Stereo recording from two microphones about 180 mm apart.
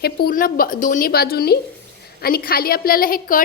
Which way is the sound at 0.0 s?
60° left (ahead or behind).